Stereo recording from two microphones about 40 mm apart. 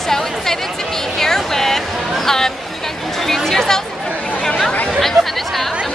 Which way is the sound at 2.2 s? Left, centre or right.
Centre.